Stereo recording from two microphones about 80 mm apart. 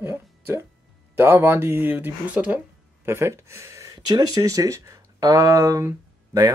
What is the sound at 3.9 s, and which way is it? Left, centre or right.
Speech, right.